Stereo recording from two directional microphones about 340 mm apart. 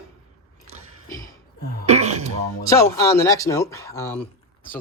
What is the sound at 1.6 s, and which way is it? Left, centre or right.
Throat clearing, left.